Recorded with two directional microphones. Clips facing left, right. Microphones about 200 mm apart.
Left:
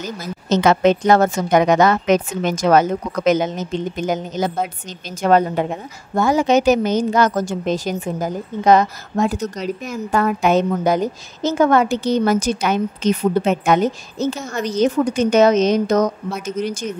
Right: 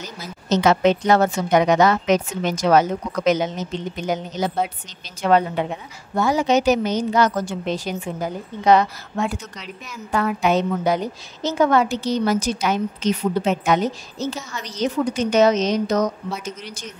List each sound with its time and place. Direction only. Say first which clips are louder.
0.0 s a woman's voice: left 7 dB; 50° left (ahead or behind)